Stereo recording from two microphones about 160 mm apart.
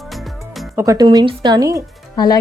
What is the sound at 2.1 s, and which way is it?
Speech, 25° left (ahead or behind).